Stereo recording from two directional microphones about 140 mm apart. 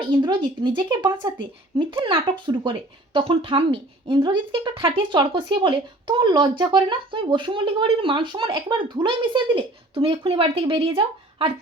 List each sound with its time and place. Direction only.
0.0 s a woman's voice: 35° right (ahead or behind)